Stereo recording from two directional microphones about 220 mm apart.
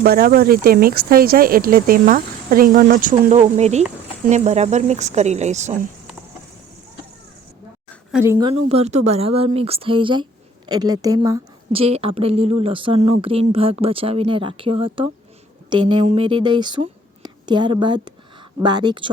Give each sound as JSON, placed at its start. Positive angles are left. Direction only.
{"t": 0.0, "sound": "speech", "side_deg": -45}
{"t": 8.1, "sound": "a woman's voice", "side_deg": -10}
{"t": 8.4, "sound": "a woman's voice", "side_deg": -30}
{"t": 11.8, "sound": "speech", "side_deg": -25}